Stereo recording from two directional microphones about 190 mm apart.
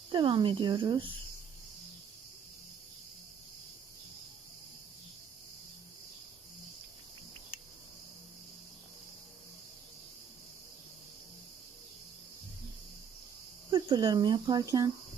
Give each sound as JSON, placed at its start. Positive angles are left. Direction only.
{"t": 0.1, "sound": "speech", "side_deg": -25}
{"t": 13.7, "sound": "speech", "side_deg": -25}